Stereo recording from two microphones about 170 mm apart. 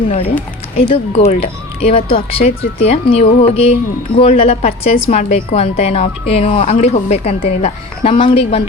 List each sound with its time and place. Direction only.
0.8 s a woman's voice: 35° left (ahead or behind)